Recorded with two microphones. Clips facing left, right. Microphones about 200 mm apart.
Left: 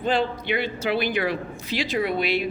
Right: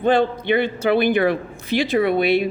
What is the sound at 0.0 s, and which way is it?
A man's voice, 55° right (ahead or behind).